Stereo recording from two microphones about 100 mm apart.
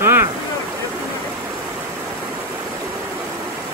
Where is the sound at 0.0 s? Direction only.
25° right (ahead or behind).